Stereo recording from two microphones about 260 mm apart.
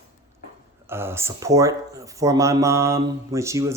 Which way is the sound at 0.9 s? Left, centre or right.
Centre.